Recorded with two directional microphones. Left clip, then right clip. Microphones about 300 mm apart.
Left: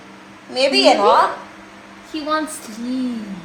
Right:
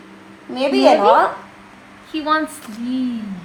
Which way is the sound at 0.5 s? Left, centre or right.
Centre.